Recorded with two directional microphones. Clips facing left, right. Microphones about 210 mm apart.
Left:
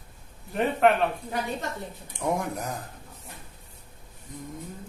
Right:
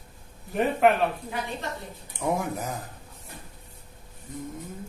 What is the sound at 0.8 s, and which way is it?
Speech, 5° right (ahead or behind).